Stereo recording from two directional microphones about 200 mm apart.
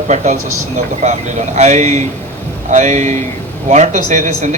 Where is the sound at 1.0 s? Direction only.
35° right (ahead or behind).